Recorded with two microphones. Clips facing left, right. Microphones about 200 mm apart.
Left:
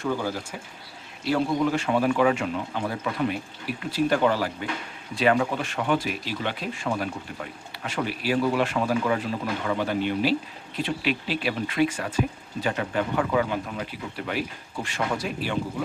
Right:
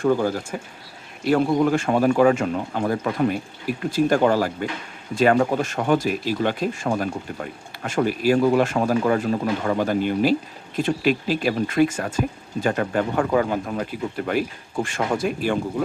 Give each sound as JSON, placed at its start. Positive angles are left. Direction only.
{"t": 0.0, "sound": "speech", "side_deg": -50}